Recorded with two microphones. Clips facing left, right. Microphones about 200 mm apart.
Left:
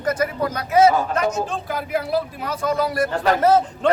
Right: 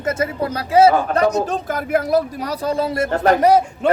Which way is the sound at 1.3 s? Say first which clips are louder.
Right 4 dB; 40° right (ahead or behind).